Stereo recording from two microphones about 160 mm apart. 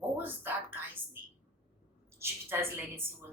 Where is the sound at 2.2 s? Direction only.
15° right (ahead or behind).